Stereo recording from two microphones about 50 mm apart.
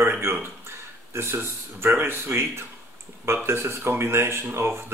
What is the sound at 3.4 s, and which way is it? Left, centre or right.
Speech, right.